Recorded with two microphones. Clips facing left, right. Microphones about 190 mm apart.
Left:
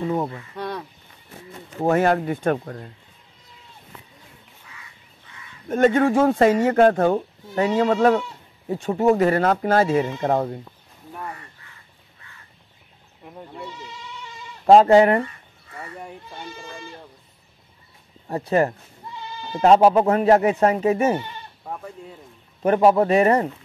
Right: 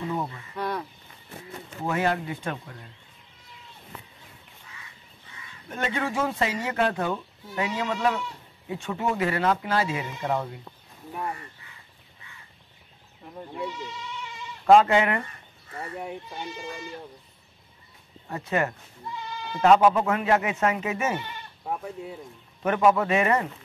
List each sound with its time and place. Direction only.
0.6 s speech: 30° left (ahead or behind)
1.9 s speech: 50° left (ahead or behind)
5.7 s speech: 45° left (ahead or behind)
14.7 s speech: 35° left (ahead or behind)
18.3 s speech: 35° left (ahead or behind)
21.6 s speech: 5° right (ahead or behind)
22.6 s speech: 35° left (ahead or behind)